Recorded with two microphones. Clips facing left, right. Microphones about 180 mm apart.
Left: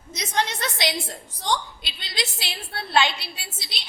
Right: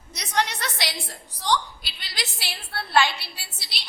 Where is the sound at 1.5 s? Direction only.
25° left (ahead or behind).